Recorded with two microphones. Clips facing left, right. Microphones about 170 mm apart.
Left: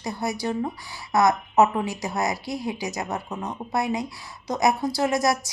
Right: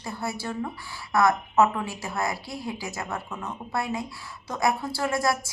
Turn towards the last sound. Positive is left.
turn(degrees=20)  # may be behind; listen again after turning